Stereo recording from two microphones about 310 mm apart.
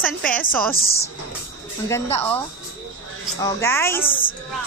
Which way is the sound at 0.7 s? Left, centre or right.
Left.